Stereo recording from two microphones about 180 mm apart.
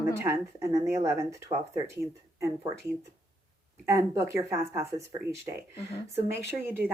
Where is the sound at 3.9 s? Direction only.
15° right (ahead or behind).